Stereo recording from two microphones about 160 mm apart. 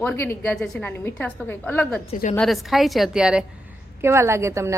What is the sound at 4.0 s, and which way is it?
Speech, 15° right (ahead or behind).